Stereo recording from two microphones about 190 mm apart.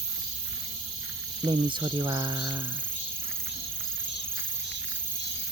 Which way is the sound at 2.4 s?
15° right (ahead or behind).